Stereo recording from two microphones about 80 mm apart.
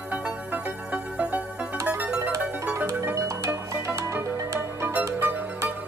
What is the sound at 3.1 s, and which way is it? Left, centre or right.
Music, right.